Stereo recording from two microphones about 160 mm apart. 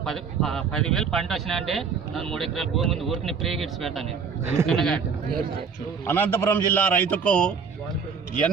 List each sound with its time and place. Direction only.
0.0 s speech: centre (ahead or behind)
6.1 s a man's voice: 10° left (ahead or behind)